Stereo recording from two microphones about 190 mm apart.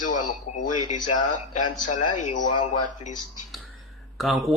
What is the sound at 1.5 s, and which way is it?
Speech, 40° left (ahead or behind).